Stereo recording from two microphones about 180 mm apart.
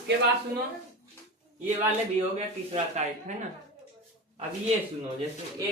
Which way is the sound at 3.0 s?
40° right (ahead or behind).